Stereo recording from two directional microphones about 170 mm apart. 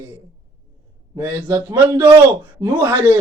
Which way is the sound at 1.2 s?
15° right (ahead or behind).